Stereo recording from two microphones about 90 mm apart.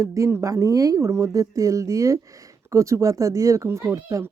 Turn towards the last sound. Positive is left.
turn(degrees=-35)  # may be behind; listen again after turning